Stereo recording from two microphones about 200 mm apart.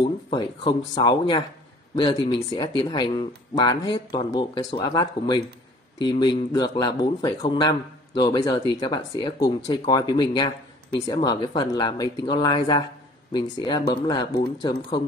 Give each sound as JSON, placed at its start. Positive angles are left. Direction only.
{"t": 0.0, "sound": "speech", "side_deg": 25}